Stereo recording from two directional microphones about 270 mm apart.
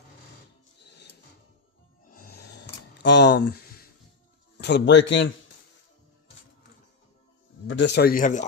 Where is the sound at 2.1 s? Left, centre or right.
Left.